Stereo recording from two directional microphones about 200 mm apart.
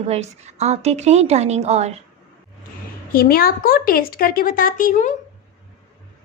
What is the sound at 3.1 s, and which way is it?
A woman's voice, 45° left (ahead or behind).